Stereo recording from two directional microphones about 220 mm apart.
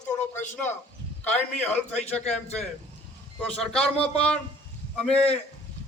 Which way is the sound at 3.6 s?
Centre (ahead or behind).